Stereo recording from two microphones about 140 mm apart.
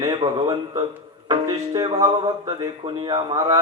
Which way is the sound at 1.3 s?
25° right (ahead or behind).